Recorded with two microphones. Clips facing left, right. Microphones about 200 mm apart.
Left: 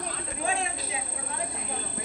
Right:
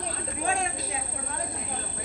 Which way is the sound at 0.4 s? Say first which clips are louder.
Right 1 dB; 45° right (ahead or behind).